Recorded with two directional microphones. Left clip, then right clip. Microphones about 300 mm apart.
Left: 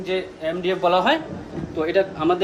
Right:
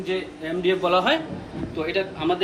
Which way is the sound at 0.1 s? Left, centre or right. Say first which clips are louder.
Left 5 dB; left.